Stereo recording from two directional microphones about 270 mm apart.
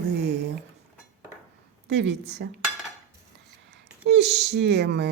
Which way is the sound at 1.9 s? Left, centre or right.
Right.